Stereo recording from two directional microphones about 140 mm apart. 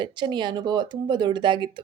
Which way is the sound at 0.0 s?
35° right (ahead or behind).